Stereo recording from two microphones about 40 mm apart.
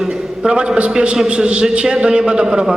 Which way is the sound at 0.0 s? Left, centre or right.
Right.